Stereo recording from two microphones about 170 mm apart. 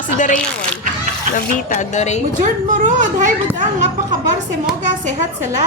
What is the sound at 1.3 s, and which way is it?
Speech, 50° left (ahead or behind).